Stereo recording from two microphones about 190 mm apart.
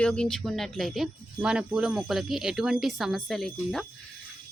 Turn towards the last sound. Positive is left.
turn(degrees=0)  # may be behind; listen again after turning